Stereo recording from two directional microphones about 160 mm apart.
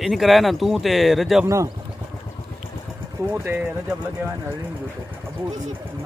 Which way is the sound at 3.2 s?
15° right (ahead or behind).